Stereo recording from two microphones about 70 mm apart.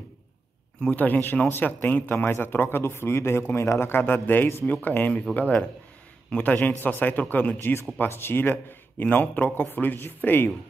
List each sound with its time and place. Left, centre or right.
0.7 s speech: left
7.5 s speech: left